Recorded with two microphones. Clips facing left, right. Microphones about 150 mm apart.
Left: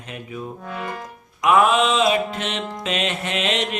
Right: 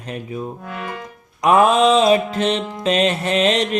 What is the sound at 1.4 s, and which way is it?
Speech, 35° right (ahead or behind).